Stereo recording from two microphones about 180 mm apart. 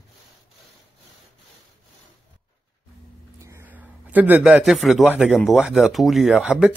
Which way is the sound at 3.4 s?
15° right (ahead or behind).